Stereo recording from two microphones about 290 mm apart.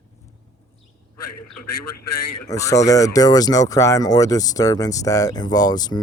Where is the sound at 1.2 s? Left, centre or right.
Left.